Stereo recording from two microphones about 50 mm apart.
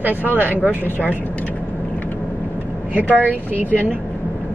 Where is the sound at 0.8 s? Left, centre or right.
Left.